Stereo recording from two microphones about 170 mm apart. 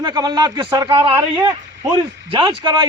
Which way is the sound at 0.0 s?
25° right (ahead or behind).